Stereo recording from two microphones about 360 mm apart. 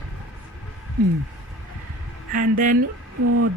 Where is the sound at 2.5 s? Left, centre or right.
Right.